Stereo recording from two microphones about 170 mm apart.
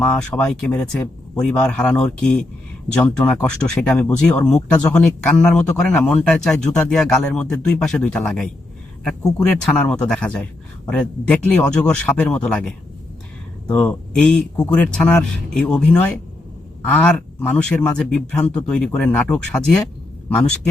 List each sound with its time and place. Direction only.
0.0 s speech: 5° left (ahead or behind)